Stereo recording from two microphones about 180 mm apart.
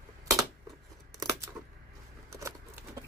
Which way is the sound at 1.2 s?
15° right (ahead or behind).